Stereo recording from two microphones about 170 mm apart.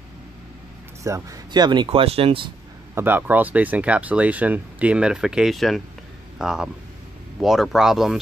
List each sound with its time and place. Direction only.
1.0 s speech: 20° right (ahead or behind)
2.9 s a man's voice: 15° right (ahead or behind)